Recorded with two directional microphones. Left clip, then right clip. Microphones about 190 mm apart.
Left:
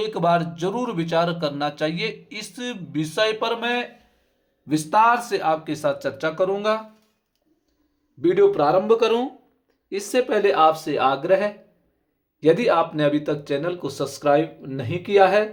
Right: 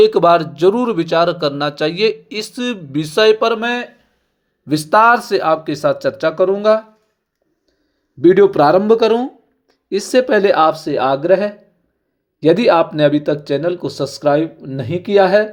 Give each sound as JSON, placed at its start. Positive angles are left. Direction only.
{"t": 0.0, "sound": "speech", "side_deg": -35}
{"t": 8.2, "sound": "speech", "side_deg": -40}
{"t": 10.7, "sound": "speech", "side_deg": -20}